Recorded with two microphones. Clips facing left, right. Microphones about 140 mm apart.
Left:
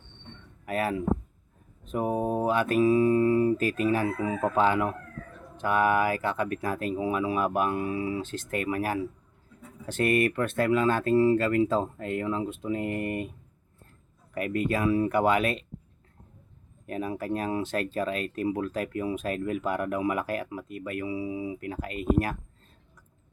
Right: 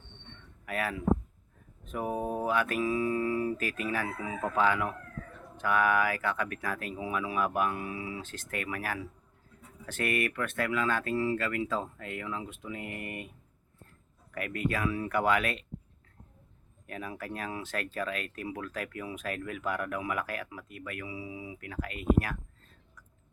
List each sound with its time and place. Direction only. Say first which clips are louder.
0.6 s speech: left 4 dB; 30° left (ahead or behind)
14.3 s speech: left 5 dB; 25° left (ahead or behind)
16.8 s speech: left 8 dB; 30° left (ahead or behind)